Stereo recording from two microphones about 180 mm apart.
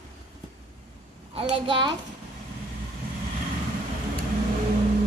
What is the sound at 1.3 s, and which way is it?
Speech, 30° right (ahead or behind).